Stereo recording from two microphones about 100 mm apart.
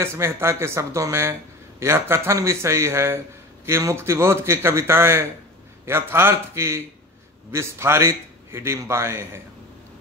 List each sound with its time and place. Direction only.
0.0 s a man's voice: 25° right (ahead or behind)